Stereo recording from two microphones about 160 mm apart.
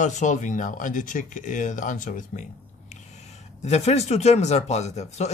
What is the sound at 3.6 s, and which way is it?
Speech, 40° left (ahead or behind).